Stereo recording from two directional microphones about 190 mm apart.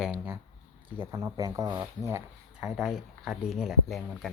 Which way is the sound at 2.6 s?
Centre (ahead or behind).